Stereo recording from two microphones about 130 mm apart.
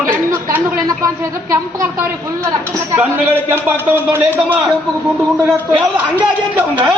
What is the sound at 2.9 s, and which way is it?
A man's voice, 15° right (ahead or behind).